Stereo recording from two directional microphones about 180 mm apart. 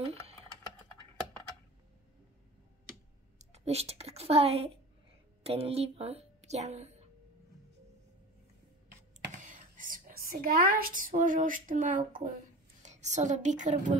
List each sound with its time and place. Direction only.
0.0 s typing: 35° right (ahead or behind)
3.3 s speech: 35° right (ahead or behind)
9.4 s a woman's voice: 45° right (ahead or behind)